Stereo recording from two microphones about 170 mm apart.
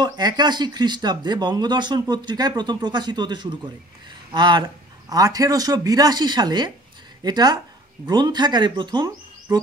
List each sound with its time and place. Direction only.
0.0 s speech: 25° right (ahead or behind)